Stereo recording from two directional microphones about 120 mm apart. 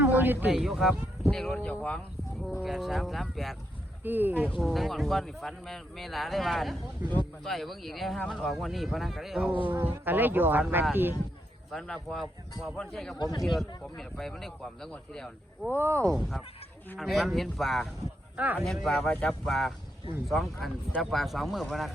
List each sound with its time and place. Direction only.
0.0 s a sound: 15° right (ahead or behind)
0.5 s speech: centre (ahead or behind)
4.0 s speech: 15° right (ahead or behind)
4.5 s speech: centre (ahead or behind)
7.0 s speech: 15° right (ahead or behind)
7.4 s speech: centre (ahead or behind)
9.7 s speech: 15° right (ahead or behind)
11.7 s speech: 5° left (ahead or behind)
13.1 s speech: 30° left (ahead or behind)
13.4 s speech: centre (ahead or behind)
15.6 s speech: 20° right (ahead or behind)
16.0 s speech: centre (ahead or behind)
18.3 s speech: 15° right (ahead or behind)
18.9 s speech: 5° left (ahead or behind)